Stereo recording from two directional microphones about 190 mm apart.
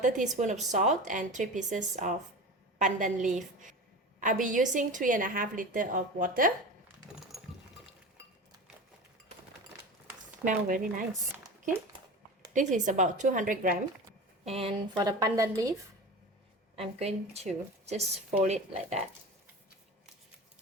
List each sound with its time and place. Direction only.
0.3 s a woman's voice: 40° right (ahead or behind)
10.4 s a woman's voice: 45° right (ahead or behind)
12.5 s a woman's voice: 40° right (ahead or behind)
14.4 s a woman's voice: 30° right (ahead or behind)
16.7 s speech: 30° right (ahead or behind)